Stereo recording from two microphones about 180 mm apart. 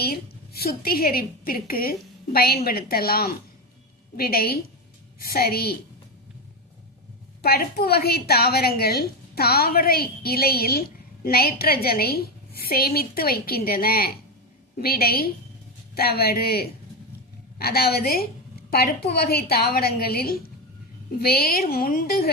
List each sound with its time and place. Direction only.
0.0 s a woman's voice: 60° left (ahead or behind)
7.4 s a woman's voice: 60° left (ahead or behind)